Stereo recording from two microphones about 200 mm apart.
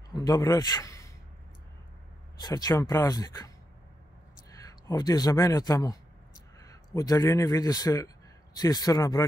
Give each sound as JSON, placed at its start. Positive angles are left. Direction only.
{"t": 0.1, "sound": "speech", "side_deg": 20}
{"t": 2.4, "sound": "speech", "side_deg": 20}
{"t": 7.0, "sound": "speech", "side_deg": 15}